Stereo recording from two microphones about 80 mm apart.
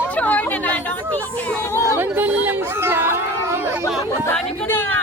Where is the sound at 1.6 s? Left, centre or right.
Left.